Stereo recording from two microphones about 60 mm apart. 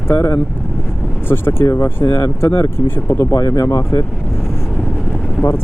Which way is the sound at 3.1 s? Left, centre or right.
Left.